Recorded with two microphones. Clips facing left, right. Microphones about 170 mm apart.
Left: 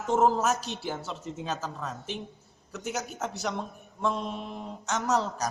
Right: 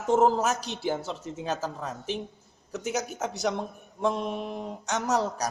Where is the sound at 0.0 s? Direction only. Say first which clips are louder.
Right 2 dB; 20° right (ahead or behind).